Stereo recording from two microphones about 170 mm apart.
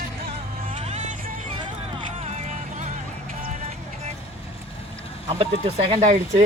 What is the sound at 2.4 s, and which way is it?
Music, 45° right (ahead or behind).